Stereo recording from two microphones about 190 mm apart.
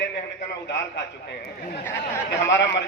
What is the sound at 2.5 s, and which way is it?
Speech, 70° left (ahead or behind).